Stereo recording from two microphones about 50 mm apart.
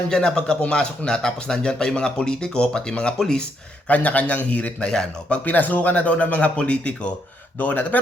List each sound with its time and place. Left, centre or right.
0.1 s speech: centre
3.8 s a man's voice: left
4.8 s speech: centre
5.5 s a man's voice: left
7.6 s speech: left